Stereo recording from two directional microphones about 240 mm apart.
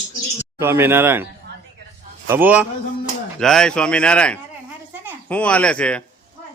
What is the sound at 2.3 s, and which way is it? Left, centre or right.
A man's voice, centre.